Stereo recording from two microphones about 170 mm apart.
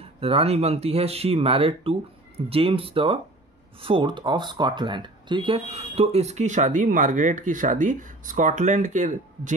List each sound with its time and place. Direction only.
0.0 s speech: 35° right (ahead or behind)